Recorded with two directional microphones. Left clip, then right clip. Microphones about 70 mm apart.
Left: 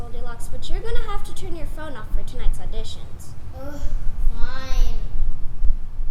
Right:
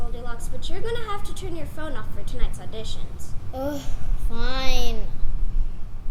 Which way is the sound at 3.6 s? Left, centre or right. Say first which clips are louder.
Right 8 dB; right.